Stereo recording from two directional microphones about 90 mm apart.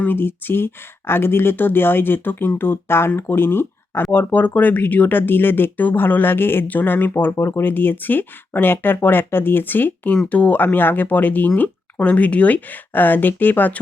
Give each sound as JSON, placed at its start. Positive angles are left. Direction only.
{"t": 0.0, "sound": "speech", "side_deg": 20}